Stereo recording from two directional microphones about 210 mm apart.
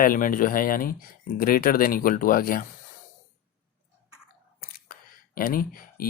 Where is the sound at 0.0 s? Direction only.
40° left (ahead or behind).